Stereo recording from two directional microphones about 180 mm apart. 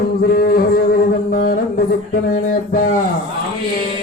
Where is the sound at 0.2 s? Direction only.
60° left (ahead or behind).